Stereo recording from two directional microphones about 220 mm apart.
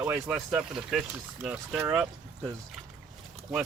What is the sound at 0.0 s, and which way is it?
Speech, 5° right (ahead or behind).